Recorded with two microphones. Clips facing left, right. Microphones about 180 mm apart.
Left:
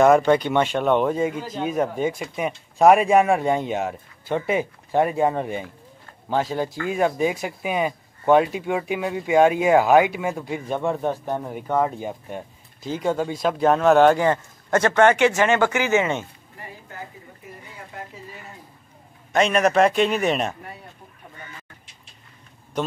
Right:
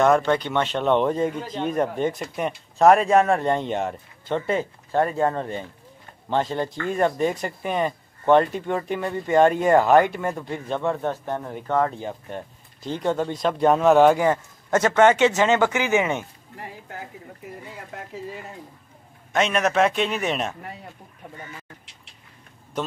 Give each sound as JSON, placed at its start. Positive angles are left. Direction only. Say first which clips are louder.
{"t": 0.0, "sound": "speech", "louder": "left 3 dB", "side_deg": 5}
{"t": 14.7, "sound": "speech", "louder": "even", "side_deg": -20}
{"t": 19.3, "sound": "a man's voice", "louder": "left 3 dB", "side_deg": 0}